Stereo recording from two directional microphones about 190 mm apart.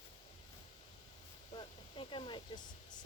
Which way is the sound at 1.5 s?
30° left (ahead or behind).